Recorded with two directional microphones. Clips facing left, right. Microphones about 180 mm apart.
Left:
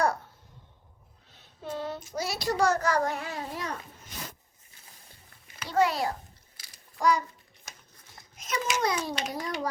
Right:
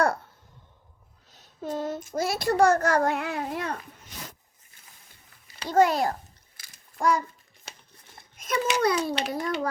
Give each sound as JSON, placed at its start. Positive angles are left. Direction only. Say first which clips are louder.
{"t": 1.3, "sound": "a child's voice", "louder": "right 4 dB", "side_deg": -40}
{"t": 5.5, "sound": "a child's voice", "louder": "right 4 dB", "side_deg": -40}
{"t": 6.6, "sound": "a sound", "louder": "right 1 dB", "side_deg": -50}
{"t": 8.2, "sound": "a child's voice", "louder": "right 5 dB", "side_deg": -55}